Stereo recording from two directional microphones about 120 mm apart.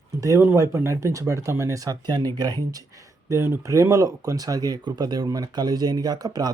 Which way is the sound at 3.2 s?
20° right (ahead or behind).